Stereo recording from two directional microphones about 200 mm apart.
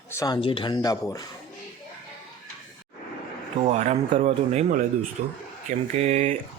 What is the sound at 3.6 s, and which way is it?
Speech, 35° right (ahead or behind).